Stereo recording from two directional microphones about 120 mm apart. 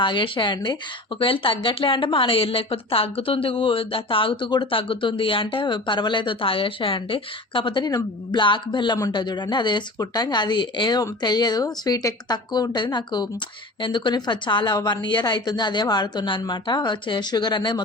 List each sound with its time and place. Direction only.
0.0 s a woman's voice: 40° left (ahead or behind)